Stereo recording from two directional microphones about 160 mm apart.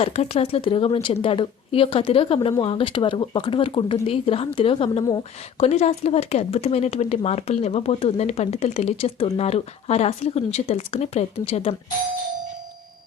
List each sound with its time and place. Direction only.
0.0 s speech: 35° left (ahead or behind)